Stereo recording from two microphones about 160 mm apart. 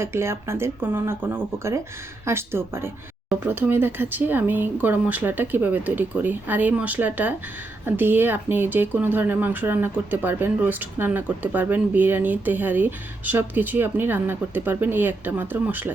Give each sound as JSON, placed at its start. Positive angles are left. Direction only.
{"t": 0.0, "sound": "speech", "side_deg": -15}